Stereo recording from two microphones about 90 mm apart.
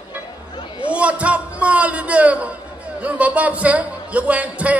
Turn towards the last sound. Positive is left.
turn(degrees=-15)  # may be behind; listen again after turning